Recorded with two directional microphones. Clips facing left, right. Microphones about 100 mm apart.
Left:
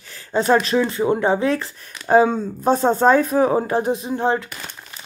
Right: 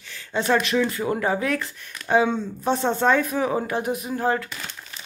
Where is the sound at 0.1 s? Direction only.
35° left (ahead or behind).